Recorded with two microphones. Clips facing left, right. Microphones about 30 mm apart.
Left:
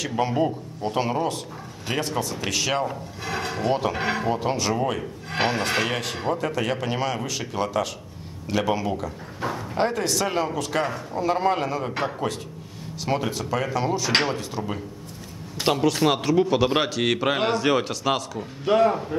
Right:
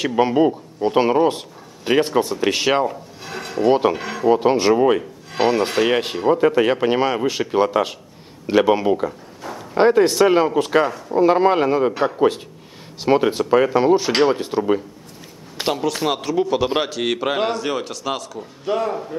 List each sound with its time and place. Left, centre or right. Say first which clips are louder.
0.0 s speech: right 7 dB; right
3.3 s a sound: right 2 dB; centre
3.6 s speech: right 9 dB; right
4.0 s speech: right 1 dB; left
4.3 s speech: right 9 dB; right
13.0 s speech: right 9 dB; right
15.6 s a man's voice: even; centre